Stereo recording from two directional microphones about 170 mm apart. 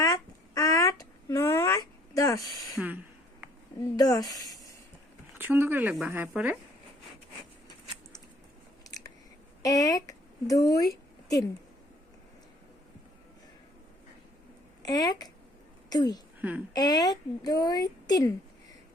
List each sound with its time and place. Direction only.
0.0 s a sound: 20° left (ahead or behind)
3.9 s speech: 20° left (ahead or behind)
5.4 s a woman's voice: 15° right (ahead or behind)
8.9 s scissors: 20° left (ahead or behind)
9.6 s speech: 20° left (ahead or behind)
14.8 s a woman's voice: 20° left (ahead or behind)
16.4 s a woman's voice: 10° right (ahead or behind)
16.7 s a woman's voice: 25° left (ahead or behind)